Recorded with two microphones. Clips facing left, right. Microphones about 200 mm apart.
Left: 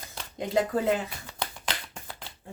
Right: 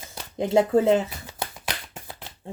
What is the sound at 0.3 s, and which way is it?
Speech, 25° right (ahead or behind).